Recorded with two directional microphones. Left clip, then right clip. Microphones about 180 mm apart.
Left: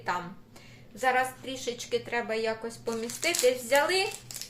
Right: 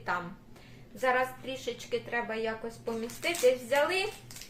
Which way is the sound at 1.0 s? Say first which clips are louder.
Left 2 dB; 20° left (ahead or behind).